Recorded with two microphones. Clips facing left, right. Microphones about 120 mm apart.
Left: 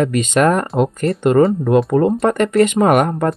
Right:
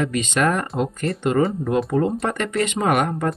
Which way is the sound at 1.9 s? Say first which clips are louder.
Left 6 dB; 55° left (ahead or behind).